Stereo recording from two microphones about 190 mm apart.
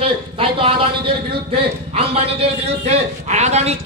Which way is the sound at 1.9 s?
30° right (ahead or behind).